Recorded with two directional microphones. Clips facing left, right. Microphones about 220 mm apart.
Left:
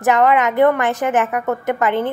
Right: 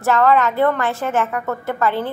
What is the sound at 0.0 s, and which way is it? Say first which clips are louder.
A woman's voice: left 1 dB; 15° left (ahead or behind).